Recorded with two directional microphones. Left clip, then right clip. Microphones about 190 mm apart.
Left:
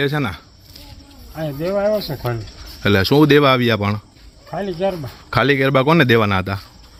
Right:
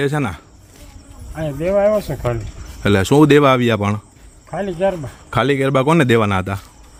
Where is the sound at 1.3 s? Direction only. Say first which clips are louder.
Right 3 dB; 15° right (ahead or behind).